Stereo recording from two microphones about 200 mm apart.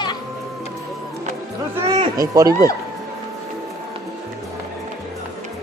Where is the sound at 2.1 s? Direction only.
15° right (ahead or behind).